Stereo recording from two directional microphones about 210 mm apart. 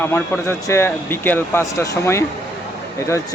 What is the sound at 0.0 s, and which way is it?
Speech, 10° left (ahead or behind).